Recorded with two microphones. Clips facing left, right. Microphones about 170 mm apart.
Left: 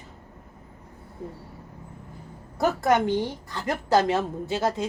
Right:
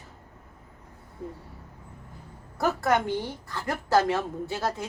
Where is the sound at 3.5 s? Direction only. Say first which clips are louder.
Left 1 dB; 20° left (ahead or behind).